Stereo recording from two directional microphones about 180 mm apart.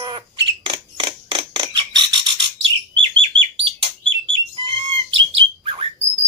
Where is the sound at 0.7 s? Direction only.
25° right (ahead or behind).